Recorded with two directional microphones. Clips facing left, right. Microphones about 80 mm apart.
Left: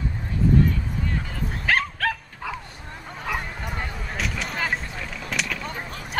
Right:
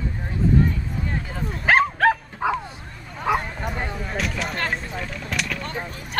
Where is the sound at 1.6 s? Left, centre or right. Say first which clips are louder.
Right 7 dB; right.